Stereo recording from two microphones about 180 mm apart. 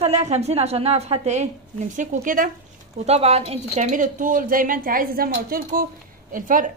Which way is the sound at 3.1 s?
35° right (ahead or behind).